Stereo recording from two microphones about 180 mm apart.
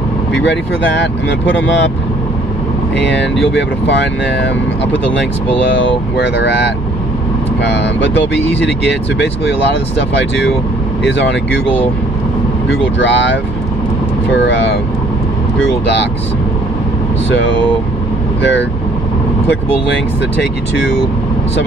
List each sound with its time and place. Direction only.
3.5 s speech: 75° left (ahead or behind)
6.2 s speech: 70° left (ahead or behind)
7.7 s speech: 75° left (ahead or behind)
10.1 s speech: 75° left (ahead or behind)
12.6 s speech: 90° left
14.3 s speech: 85° left
18.4 s speech: 80° left